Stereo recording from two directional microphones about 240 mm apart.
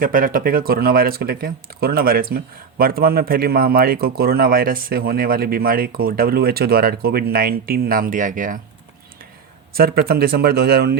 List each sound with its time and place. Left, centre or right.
0.0 s speech: right
9.7 s speech: right